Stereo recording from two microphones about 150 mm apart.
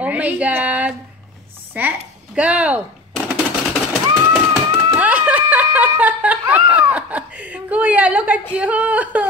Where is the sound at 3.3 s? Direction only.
Centre (ahead or behind).